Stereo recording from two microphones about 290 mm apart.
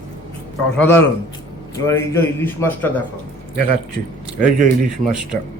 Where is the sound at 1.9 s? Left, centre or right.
Centre.